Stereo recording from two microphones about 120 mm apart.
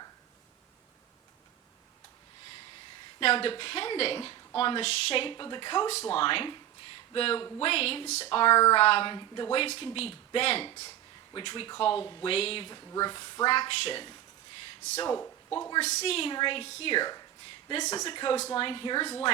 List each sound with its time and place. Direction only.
3.2 s a woman's voice: 50° left (ahead or behind)
5.9 s a woman's voice: 55° left (ahead or behind)
8.3 s a woman's voice: 45° left (ahead or behind)
9.6 s a woman's voice: 50° left (ahead or behind)
12.7 s speech: 35° left (ahead or behind)
15.8 s a woman's voice: 65° left (ahead or behind); by 19.3 s 45° left (ahead or behind)